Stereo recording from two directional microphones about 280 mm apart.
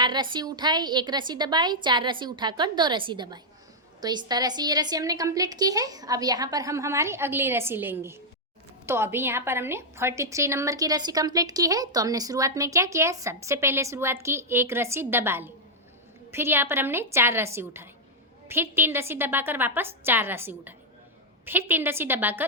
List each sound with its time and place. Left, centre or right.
0.0 s a woman's voice: centre